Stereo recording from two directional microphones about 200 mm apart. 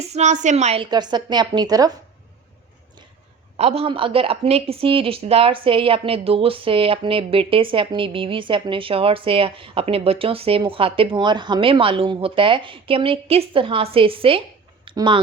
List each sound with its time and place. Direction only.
0.0 s a woman's voice: 35° right (ahead or behind); by 1.9 s 20° right (ahead or behind)
3.6 s a woman's voice: 30° right (ahead or behind)